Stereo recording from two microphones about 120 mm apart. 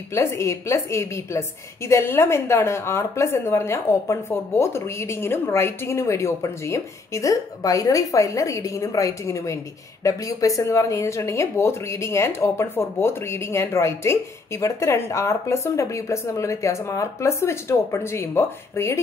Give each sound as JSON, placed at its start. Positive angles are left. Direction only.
{"t": 0.1, "sound": "a woman's voice", "side_deg": 25}